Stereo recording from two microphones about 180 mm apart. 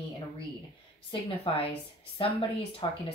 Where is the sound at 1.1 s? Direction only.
30° left (ahead or behind).